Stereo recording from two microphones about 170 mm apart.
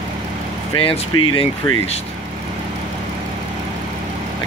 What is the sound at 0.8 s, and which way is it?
Speech, 30° left (ahead or behind).